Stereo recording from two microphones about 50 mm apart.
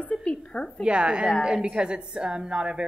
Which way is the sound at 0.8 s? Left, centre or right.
Right.